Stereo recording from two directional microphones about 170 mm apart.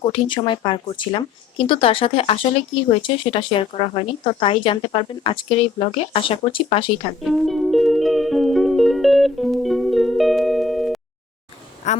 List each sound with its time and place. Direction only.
0.0 s speech: 30° left (ahead or behind)
7.3 s music: centre (ahead or behind)
11.8 s a woman's voice: 45° left (ahead or behind)